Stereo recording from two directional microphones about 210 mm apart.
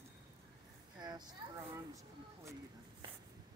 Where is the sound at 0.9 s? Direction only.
20° right (ahead or behind).